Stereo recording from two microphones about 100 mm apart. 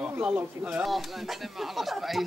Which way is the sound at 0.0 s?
15° right (ahead or behind).